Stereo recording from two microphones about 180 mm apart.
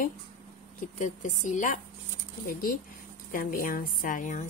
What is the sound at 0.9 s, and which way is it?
A woman's voice, 45° left (ahead or behind).